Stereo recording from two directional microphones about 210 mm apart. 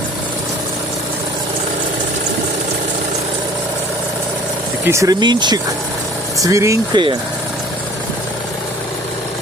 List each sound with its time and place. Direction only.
4.9 s speech: 15° right (ahead or behind)